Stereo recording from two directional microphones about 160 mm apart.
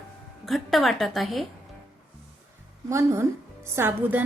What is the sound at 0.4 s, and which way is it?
A woman's voice, centre (ahead or behind).